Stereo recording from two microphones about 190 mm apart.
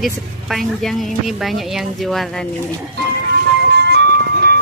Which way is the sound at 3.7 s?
60° right (ahead or behind).